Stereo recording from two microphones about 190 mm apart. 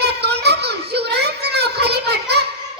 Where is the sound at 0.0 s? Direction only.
60° right (ahead or behind).